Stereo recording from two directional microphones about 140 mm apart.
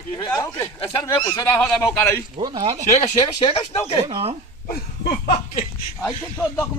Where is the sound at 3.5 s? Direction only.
40° left (ahead or behind).